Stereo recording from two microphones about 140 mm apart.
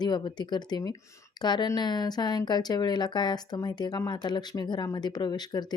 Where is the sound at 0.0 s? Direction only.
30° left (ahead or behind).